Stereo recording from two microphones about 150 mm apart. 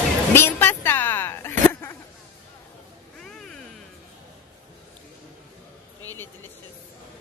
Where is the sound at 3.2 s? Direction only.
5° left (ahead or behind).